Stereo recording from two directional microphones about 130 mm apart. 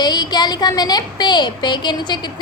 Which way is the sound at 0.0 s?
30° left (ahead or behind).